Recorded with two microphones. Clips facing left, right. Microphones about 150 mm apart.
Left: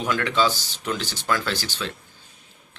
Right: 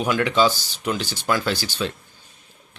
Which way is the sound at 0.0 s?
15° right (ahead or behind).